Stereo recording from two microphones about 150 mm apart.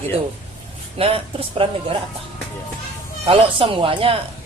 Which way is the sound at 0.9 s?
40° right (ahead or behind).